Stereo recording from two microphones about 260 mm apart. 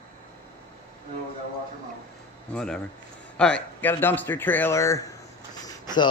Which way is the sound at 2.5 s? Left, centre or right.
Centre.